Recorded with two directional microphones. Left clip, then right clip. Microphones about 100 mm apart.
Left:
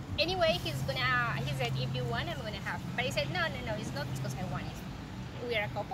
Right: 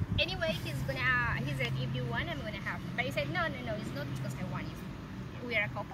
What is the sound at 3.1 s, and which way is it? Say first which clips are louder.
Speech: left 1 dB; 35° left (ahead or behind).